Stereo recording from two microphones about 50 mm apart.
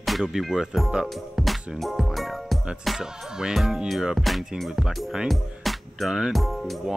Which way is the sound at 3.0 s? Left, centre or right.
Centre.